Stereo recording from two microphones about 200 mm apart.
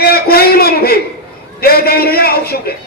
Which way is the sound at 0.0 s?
50° left (ahead or behind).